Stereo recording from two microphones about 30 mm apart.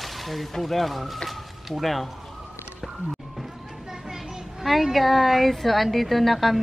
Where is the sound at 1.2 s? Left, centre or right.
Centre.